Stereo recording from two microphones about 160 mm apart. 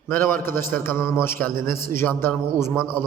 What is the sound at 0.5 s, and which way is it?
Speech, 60° right (ahead or behind).